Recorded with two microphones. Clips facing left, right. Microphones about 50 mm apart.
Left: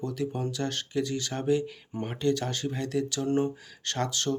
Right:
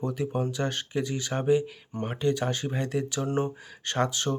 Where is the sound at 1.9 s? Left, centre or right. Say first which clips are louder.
Right 2 dB; centre.